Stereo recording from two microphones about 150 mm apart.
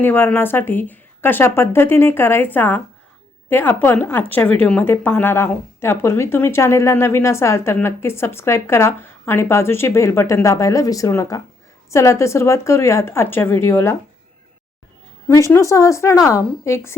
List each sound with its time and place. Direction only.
0.0 s a woman's voice: 15° left (ahead or behind)
15.3 s speech: 20° left (ahead or behind)